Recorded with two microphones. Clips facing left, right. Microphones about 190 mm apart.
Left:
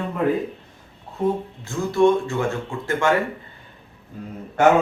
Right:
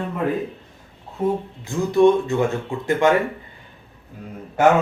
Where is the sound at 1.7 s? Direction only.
15° right (ahead or behind).